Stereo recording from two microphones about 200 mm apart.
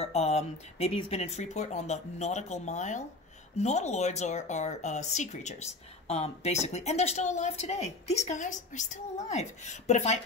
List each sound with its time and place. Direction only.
0.0 s speech: 30° left (ahead or behind)